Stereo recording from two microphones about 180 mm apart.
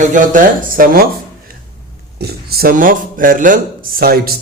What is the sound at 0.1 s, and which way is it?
Speech, 45° right (ahead or behind).